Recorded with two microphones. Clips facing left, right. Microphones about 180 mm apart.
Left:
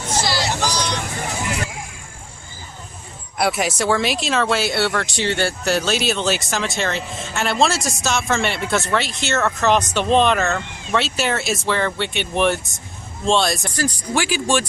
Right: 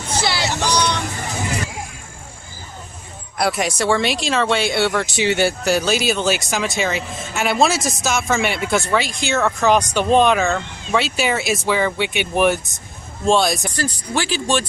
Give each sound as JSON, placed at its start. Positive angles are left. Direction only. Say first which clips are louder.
{"t": 0.2, "sound": "vehicle", "louder": "even", "side_deg": -60}
{"t": 3.3, "sound": "speech", "louder": "even", "side_deg": 0}
{"t": 13.7, "sound": "speech", "louder": "left 1 dB", "side_deg": 10}